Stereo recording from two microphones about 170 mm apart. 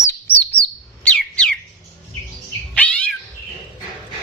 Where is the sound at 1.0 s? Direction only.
5° left (ahead or behind).